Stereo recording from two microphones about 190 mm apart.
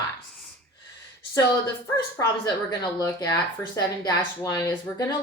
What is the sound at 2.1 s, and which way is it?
Speech, 20° left (ahead or behind).